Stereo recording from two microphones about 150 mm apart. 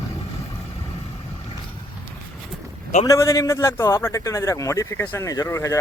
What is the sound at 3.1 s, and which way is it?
Speech, 20° left (ahead or behind).